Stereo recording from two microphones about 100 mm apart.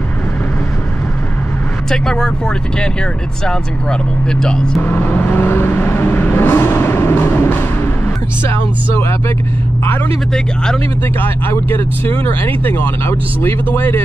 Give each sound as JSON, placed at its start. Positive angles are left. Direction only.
{"t": 1.9, "sound": "speech", "side_deg": 5}
{"t": 4.8, "sound": "vehicle", "side_deg": 20}
{"t": 10.3, "sound": "speech", "side_deg": 5}
{"t": 11.1, "sound": "speech", "side_deg": 20}